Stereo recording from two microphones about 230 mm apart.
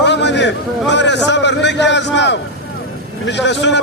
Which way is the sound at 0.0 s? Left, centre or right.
Left.